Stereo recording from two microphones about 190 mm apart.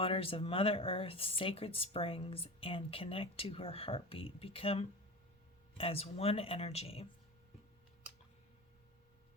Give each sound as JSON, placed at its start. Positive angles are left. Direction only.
{"t": 0.0, "sound": "speech", "side_deg": 30}